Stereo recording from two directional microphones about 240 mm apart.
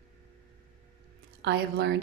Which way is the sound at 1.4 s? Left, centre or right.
Right.